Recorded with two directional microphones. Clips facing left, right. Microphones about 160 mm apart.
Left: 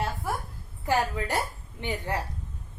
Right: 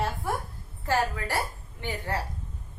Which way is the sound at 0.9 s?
20° left (ahead or behind).